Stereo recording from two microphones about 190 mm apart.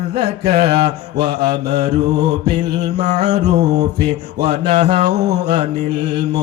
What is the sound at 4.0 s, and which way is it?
Music, 60° right (ahead or behind).